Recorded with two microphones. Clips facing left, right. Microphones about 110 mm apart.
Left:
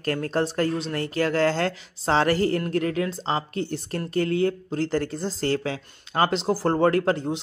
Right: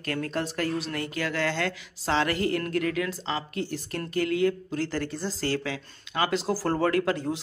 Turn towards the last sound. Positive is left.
turn(degrees=30)  # may be behind; listen again after turning